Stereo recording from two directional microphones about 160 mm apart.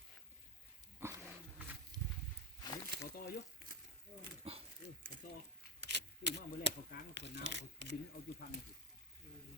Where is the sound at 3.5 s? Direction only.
65° right (ahead or behind).